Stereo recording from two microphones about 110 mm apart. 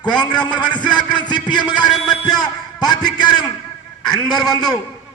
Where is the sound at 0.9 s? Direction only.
45° left (ahead or behind).